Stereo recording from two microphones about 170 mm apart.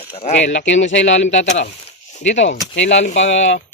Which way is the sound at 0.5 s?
90° left.